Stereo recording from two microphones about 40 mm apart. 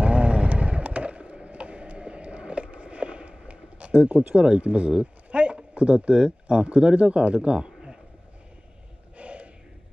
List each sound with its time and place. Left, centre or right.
0.0 s vehicle: right
4.4 s speech: right
9.1 s gasp: right